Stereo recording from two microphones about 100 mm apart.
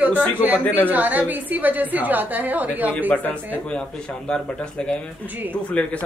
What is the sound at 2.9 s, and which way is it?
A man's voice, 20° left (ahead or behind).